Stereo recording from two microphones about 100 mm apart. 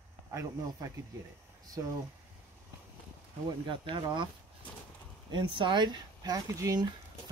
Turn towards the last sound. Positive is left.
turn(degrees=-35)  # may be behind; listen again after turning